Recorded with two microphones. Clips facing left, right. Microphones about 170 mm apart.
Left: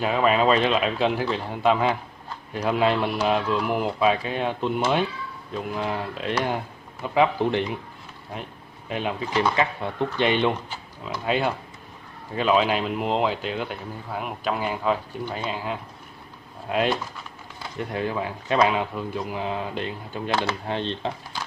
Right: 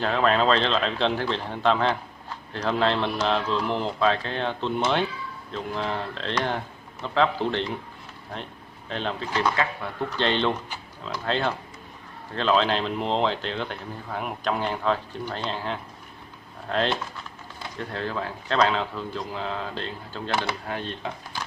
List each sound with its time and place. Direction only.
0.0 s speech: 10° left (ahead or behind)
20.6 s speech: 25° left (ahead or behind)